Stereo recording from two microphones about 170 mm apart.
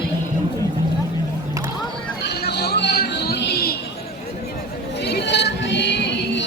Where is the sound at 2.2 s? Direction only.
75° left (ahead or behind).